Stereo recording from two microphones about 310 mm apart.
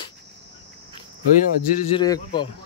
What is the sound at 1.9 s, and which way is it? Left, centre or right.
Speech, centre.